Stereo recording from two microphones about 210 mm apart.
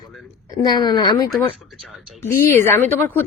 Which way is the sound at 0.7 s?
20° left (ahead or behind).